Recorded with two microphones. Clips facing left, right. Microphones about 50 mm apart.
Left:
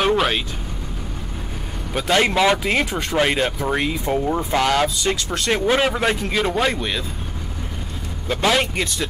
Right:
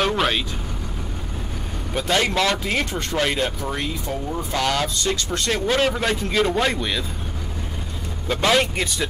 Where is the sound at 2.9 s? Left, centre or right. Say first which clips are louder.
Left 2 dB; centre.